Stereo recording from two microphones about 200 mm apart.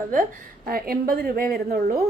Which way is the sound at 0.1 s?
45° right (ahead or behind).